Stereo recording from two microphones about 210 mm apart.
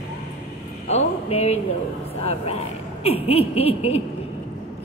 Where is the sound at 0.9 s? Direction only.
30° left (ahead or behind).